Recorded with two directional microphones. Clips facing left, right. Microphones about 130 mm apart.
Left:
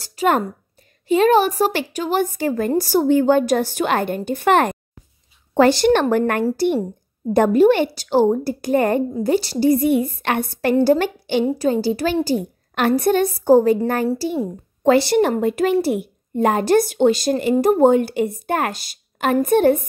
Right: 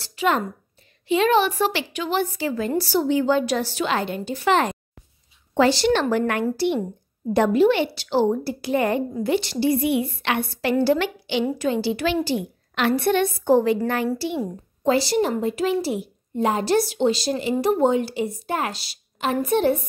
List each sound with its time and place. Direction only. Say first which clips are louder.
0.0 s a woman's voice: left 4 dB; 40° left (ahead or behind)
14.8 s a woman's voice: left 5 dB; 60° left (ahead or behind)